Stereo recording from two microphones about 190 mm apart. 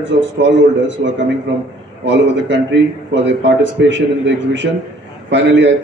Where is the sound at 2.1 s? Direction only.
70° right (ahead or behind).